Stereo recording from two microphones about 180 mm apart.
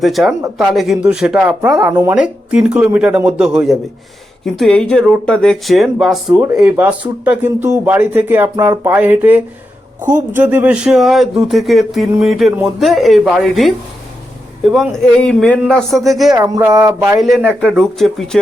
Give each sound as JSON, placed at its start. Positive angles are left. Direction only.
{"t": 0.0, "sound": "speech", "side_deg": 0}
{"t": 16.6, "sound": "speech", "side_deg": -20}
{"t": 17.2, "sound": "speech", "side_deg": 0}